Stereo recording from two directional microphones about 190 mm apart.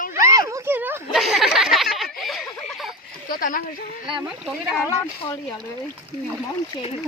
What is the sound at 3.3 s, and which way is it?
Speech, 50° left (ahead or behind).